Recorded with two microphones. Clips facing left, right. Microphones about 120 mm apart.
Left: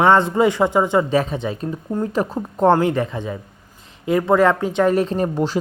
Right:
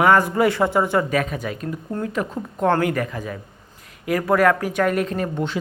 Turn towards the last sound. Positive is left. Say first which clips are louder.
# left 4 dB
turn(degrees=30)  # may be behind; listen again after turning